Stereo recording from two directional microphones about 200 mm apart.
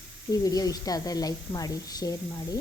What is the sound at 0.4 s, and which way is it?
A woman's voice, 20° left (ahead or behind).